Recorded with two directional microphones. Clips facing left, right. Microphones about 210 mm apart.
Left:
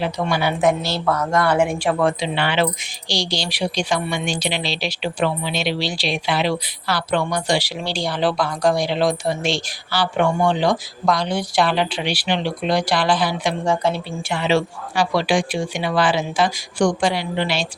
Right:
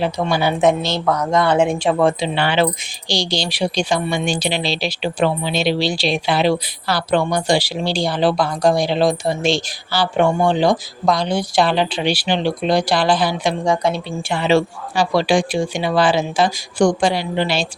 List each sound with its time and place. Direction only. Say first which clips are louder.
0.0 s a woman's voice: right 3 dB; 35° right (ahead or behind)
0.6 s a woman's voice: right 2 dB; 20° right (ahead or behind)
13.7 s speech: right 1 dB; 15° right (ahead or behind)
14.3 s a woman's voice: right 3 dB; 35° right (ahead or behind)